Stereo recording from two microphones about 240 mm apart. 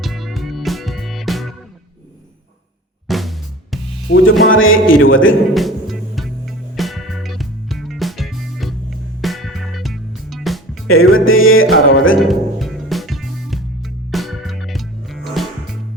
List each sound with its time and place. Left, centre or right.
0.0 s music: centre
3.1 s drum: centre
4.1 s a man's voice: left
5.5 s music: centre
10.8 s a man's voice: left
12.2 s music: centre